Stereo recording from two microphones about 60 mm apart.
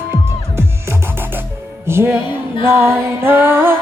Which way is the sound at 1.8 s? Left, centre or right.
Right.